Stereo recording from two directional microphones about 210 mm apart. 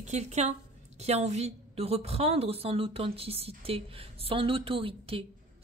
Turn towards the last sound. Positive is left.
turn(degrees=-25)  # may be behind; listen again after turning